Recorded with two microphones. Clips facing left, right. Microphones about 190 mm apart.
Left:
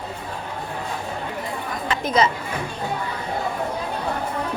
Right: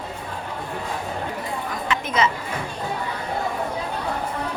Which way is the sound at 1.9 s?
35° left (ahead or behind).